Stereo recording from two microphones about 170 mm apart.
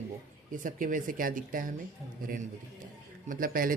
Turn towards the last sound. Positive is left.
turn(degrees=-55)  # may be behind; listen again after turning